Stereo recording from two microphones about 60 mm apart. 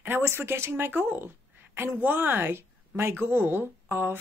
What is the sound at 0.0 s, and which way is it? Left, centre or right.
Speech, right.